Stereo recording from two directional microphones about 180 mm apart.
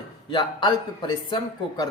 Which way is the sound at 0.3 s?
25° left (ahead or behind).